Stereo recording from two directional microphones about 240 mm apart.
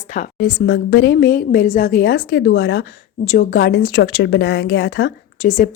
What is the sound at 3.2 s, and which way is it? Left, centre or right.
A woman's voice, left.